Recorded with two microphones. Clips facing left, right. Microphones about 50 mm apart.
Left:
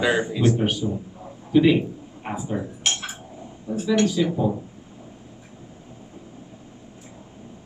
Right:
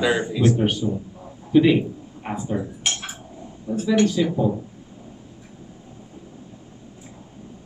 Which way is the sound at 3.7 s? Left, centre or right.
Centre.